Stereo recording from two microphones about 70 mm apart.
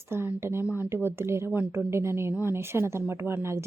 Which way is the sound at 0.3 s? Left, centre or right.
Right.